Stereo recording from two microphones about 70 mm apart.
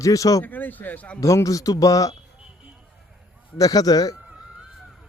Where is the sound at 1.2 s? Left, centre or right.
Left.